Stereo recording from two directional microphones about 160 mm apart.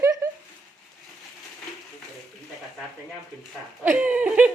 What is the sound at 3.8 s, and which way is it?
Speech, 10° right (ahead or behind).